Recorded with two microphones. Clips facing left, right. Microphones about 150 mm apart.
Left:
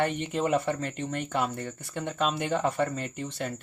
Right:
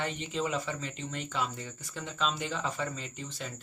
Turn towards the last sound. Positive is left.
turn(degrees=60)  # may be behind; listen again after turning